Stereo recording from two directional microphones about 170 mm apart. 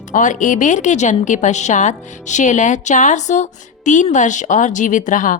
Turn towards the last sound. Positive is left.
turn(degrees=50)  # may be behind; listen again after turning